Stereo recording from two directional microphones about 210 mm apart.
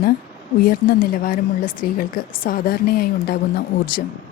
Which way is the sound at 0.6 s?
45° left (ahead or behind).